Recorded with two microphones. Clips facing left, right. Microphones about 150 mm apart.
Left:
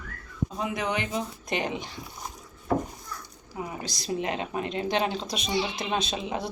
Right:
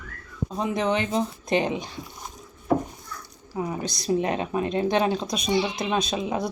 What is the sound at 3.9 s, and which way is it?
A woman's voice, 20° left (ahead or behind).